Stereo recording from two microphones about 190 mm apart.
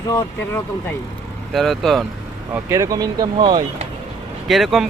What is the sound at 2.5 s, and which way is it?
Speech, 15° right (ahead or behind).